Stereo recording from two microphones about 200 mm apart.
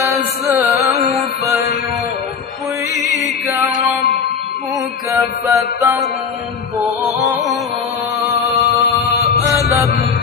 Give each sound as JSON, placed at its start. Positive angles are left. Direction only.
{"t": 0.0, "sound": "music", "side_deg": -15}
{"t": 5.1, "sound": "music", "side_deg": -15}
{"t": 9.7, "sound": "mantra", "side_deg": -15}